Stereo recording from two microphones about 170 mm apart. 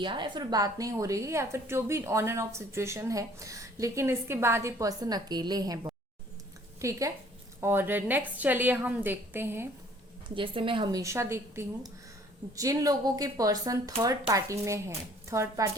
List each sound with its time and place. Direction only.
0.0 s a woman's voice: 30° right (ahead or behind)
10.2 s a woman's voice: 30° right (ahead or behind)
11.0 s a woman's voice: 15° right (ahead or behind)